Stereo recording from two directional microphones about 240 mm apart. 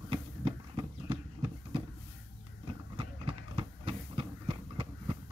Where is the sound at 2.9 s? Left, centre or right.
Right.